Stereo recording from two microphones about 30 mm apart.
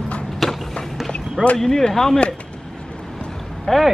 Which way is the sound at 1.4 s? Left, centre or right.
Left.